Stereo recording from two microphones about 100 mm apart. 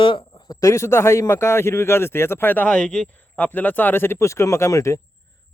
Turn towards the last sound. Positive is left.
turn(degrees=30)  # may be behind; listen again after turning